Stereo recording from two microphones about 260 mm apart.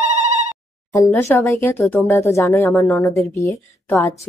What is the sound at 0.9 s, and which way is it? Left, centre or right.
A woman's voice, centre.